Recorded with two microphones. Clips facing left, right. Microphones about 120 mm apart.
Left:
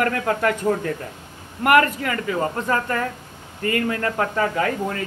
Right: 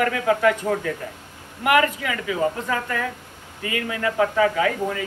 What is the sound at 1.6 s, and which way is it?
Speech, 50° left (ahead or behind).